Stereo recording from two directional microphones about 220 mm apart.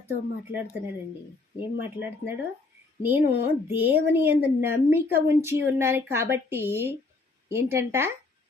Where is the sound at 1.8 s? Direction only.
10° right (ahead or behind).